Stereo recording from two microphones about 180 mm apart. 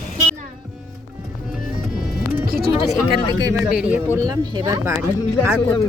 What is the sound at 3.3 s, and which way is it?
Speech, 20° right (ahead or behind).